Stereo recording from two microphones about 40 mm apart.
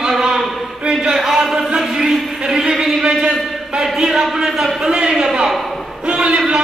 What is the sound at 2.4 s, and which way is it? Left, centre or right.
A man's voice, centre.